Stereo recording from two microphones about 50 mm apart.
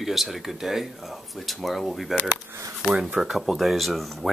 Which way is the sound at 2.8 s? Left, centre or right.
Centre.